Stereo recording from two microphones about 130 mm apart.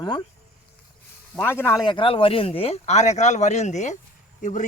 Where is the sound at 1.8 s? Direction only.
40° left (ahead or behind); by 4.6 s 70° left (ahead or behind).